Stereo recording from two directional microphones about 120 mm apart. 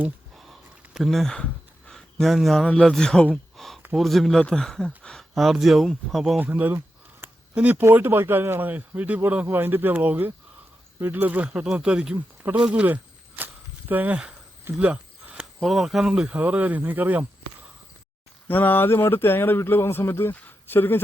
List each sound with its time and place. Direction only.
0.3 s a sound: centre (ahead or behind)
1.9 s speech: 5° left (ahead or behind)
6.4 s speech: 15° right (ahead or behind)
18.4 s speech: 15° left (ahead or behind)